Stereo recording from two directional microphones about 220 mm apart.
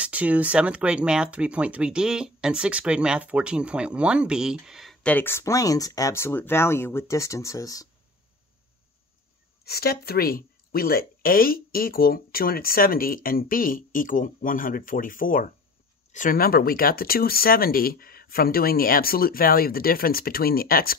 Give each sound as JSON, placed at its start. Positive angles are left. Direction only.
{"t": 0.0, "sound": "speech", "side_deg": -5}
{"t": 9.7, "sound": "speech", "side_deg": 45}